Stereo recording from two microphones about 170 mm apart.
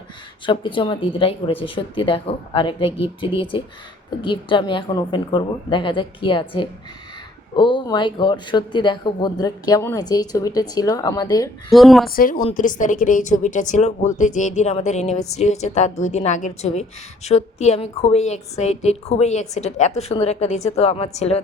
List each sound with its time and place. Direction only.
0.4 s a woman's voice: 30° left (ahead or behind)
11.7 s a woman's voice: centre (ahead or behind)
12.0 s a woman's voice: 55° left (ahead or behind); by 21.4 s 40° left (ahead or behind)